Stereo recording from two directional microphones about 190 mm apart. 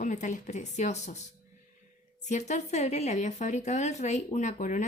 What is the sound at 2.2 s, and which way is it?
Speech, 40° left (ahead or behind).